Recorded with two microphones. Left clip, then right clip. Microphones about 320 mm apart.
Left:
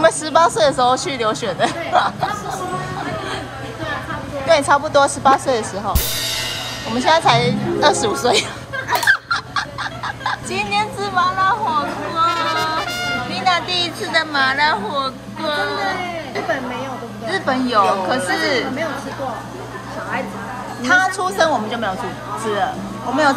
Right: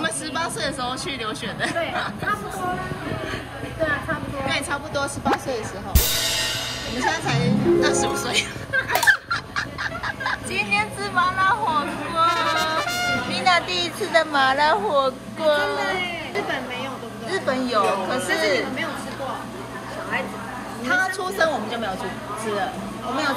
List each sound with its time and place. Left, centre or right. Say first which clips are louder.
0.0 s speech: left 12 dB; centre
4.5 s speech: left 13 dB; centre
7.1 s speech: left 11 dB; centre
8.9 s fowl: left 3 dB; centre
9.3 s speech: left 5 dB; centre
12.3 s trumpet: left 2 dB; centre
13.3 s a woman's voice: left 2 dB; centre
17.3 s a woman's voice: left 4 dB; centre
20.8 s speech: left 7 dB; centre